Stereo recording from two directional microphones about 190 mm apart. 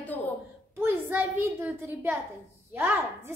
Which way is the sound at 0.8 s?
10° right (ahead or behind).